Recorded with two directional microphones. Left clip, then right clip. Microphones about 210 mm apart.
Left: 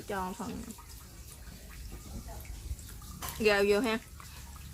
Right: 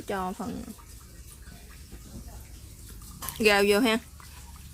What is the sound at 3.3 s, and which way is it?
Speech, 40° right (ahead or behind).